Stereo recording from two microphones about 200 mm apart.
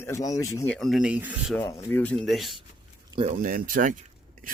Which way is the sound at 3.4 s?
45° right (ahead or behind).